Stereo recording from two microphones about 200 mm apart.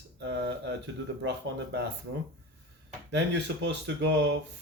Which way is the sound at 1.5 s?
65° right (ahead or behind).